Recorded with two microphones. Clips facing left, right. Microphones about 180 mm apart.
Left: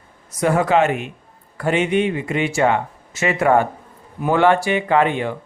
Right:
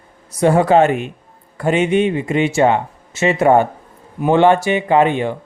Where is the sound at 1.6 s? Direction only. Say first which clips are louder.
Right 3 dB; 20° right (ahead or behind).